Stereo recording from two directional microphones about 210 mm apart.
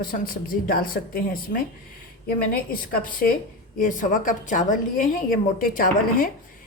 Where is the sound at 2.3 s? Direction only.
40° left (ahead or behind).